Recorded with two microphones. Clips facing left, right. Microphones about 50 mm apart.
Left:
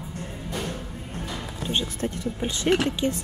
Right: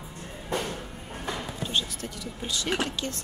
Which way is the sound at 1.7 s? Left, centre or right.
Left.